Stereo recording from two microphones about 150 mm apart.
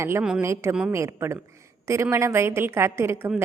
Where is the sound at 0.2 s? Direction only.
5° right (ahead or behind).